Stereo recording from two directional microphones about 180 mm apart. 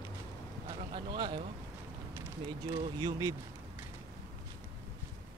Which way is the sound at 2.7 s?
25° right (ahead or behind).